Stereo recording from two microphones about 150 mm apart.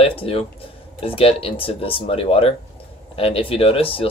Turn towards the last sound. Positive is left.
turn(degrees=40)  # may be behind; listen again after turning